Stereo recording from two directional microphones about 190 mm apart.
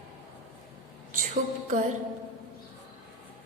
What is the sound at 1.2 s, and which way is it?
Music, 40° right (ahead or behind).